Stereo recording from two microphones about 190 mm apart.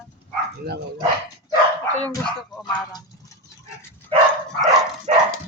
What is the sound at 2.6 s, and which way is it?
Speech, 20° left (ahead or behind).